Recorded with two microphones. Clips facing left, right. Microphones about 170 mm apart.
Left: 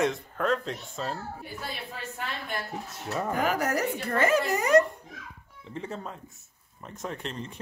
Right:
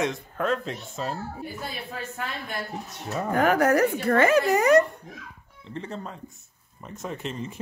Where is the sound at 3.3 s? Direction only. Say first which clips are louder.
Right 8 dB; 55° right (ahead or behind).